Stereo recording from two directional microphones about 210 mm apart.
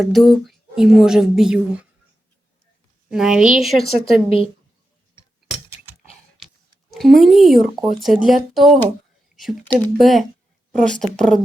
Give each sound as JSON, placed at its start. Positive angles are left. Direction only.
{"t": 0.0, "sound": "speech", "side_deg": 0}
{"t": 3.1, "sound": "speech", "side_deg": -5}
{"t": 3.8, "sound": "a woman's voice", "side_deg": 25}
{"t": 6.0, "sound": "typing", "side_deg": 0}
{"t": 6.9, "sound": "speech", "side_deg": 0}